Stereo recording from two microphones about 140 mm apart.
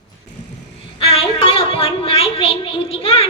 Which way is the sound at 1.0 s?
45° left (ahead or behind).